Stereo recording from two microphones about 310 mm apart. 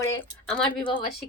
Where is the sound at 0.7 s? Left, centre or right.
Centre.